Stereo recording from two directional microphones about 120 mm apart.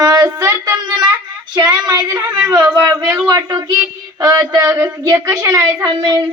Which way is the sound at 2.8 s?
35° right (ahead or behind).